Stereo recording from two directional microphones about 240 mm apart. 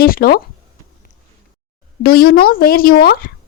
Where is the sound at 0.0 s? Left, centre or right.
Left.